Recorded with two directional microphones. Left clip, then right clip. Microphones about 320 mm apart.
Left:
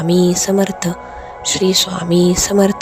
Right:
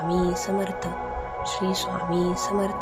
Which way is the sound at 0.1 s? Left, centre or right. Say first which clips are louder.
Left 12 dB; left.